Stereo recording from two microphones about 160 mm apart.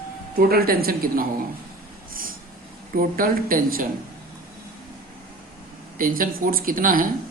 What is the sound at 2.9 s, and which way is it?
Speech, 60° right (ahead or behind).